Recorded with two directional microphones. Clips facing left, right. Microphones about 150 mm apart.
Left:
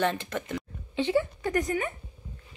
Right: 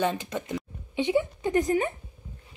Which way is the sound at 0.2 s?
10° right (ahead or behind).